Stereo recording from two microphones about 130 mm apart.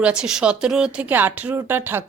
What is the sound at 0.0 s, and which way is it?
Speech, 5° right (ahead or behind).